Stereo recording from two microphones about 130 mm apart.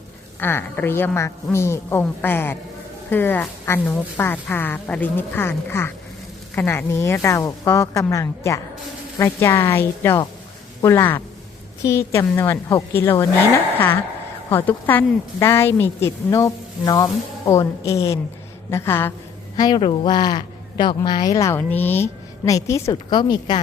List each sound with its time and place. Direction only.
0.3 s a woman's voice: 15° left (ahead or behind)
14.5 s a woman's voice: 15° left (ahead or behind)
19.5 s speech: 30° left (ahead or behind)
21.6 s a woman's voice: 15° left (ahead or behind); by 23.6 s 35° left (ahead or behind)